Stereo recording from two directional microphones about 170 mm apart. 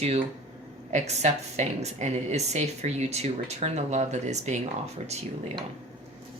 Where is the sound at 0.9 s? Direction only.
40° right (ahead or behind).